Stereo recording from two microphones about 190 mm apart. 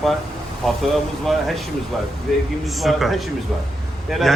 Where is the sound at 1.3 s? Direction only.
Centre (ahead or behind).